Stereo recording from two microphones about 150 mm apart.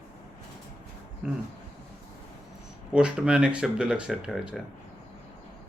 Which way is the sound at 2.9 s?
5° right (ahead or behind).